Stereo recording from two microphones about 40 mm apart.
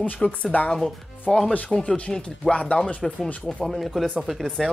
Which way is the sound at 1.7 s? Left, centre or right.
Left.